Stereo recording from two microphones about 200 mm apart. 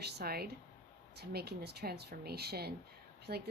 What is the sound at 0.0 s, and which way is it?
Speech, 50° right (ahead or behind).